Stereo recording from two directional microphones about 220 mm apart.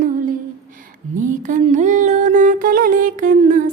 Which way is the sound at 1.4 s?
35° right (ahead or behind).